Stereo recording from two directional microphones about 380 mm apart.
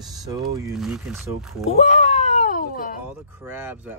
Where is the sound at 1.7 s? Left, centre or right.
Centre.